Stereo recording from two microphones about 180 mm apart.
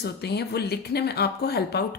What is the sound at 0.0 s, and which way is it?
Speech, 65° left (ahead or behind).